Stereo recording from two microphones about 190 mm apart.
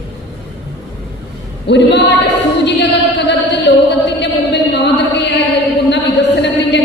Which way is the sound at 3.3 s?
65° left (ahead or behind).